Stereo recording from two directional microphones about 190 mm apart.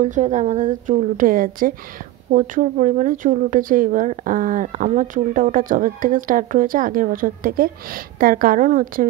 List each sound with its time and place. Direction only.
0.0 s speech: 40° right (ahead or behind)